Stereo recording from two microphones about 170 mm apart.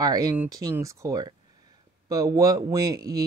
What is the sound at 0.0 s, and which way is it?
Speech, 20° right (ahead or behind).